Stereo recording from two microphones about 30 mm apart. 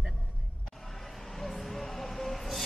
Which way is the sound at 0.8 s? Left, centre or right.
Centre.